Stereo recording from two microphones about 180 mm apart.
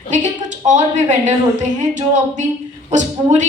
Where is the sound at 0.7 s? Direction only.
40° right (ahead or behind).